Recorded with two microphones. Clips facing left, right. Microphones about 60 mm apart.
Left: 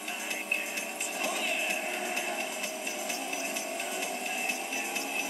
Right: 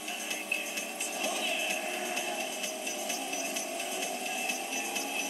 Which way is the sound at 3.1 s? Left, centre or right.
Left.